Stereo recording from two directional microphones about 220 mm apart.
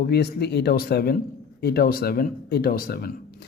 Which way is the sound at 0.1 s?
45° left (ahead or behind).